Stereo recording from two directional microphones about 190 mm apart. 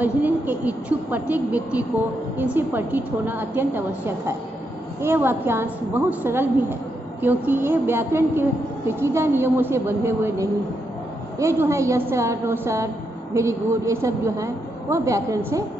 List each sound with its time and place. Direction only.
0.0 s a woman's voice: 10° right (ahead or behind)